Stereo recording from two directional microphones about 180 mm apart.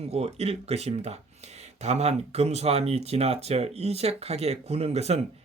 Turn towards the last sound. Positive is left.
turn(degrees=-35)  # may be behind; listen again after turning